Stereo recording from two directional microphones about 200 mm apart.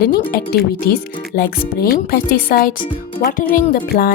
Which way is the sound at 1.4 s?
50° left (ahead or behind).